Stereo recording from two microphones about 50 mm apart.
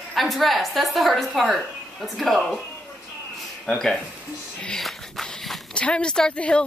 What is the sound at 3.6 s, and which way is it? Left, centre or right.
Speech, centre.